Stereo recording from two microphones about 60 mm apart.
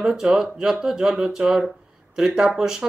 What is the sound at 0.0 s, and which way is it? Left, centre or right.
Speech, centre.